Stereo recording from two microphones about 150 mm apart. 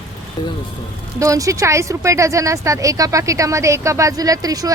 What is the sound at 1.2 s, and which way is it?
Speech, 20° right (ahead or behind).